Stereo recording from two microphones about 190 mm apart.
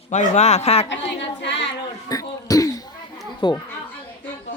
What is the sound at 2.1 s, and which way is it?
Throat clearing, 20° left (ahead or behind).